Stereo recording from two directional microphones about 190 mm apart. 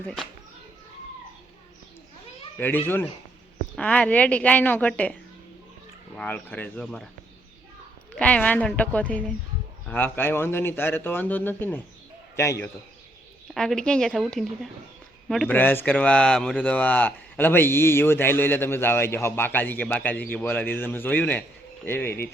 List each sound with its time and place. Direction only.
0.0 s speech: 5° left (ahead or behind)
2.6 s speech: 10° left (ahead or behind)
6.1 s speech: 5° left (ahead or behind)
8.1 s speech: 5° left (ahead or behind)
13.5 s speech: centre (ahead or behind)